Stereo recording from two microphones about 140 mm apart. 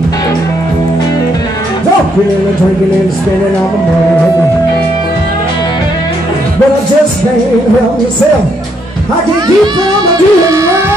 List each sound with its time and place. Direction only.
10.0 s music: 25° right (ahead or behind)